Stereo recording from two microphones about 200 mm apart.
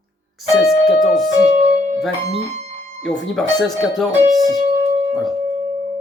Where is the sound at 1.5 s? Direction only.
40° right (ahead or behind).